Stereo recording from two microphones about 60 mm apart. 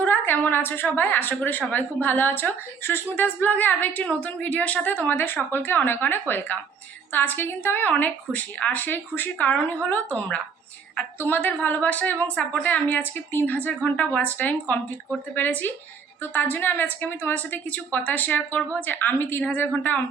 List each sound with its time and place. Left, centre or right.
0.0 s a woman's voice: left
11.2 s a woman's voice: left